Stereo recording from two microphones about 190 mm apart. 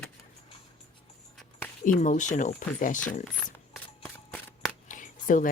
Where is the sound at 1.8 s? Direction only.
45° left (ahead or behind).